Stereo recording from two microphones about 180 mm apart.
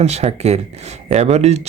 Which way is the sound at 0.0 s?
35° right (ahead or behind).